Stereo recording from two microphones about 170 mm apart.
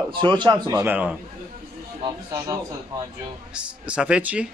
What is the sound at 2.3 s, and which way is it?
Speech, 20° right (ahead or behind).